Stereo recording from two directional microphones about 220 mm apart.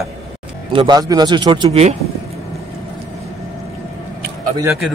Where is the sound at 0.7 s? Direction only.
20° right (ahead or behind).